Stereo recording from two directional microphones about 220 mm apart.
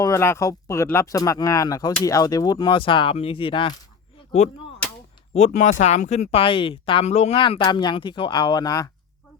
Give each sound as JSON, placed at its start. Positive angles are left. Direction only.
{"t": 0.0, "sound": "speech", "side_deg": 10}
{"t": 5.3, "sound": "speech", "side_deg": 35}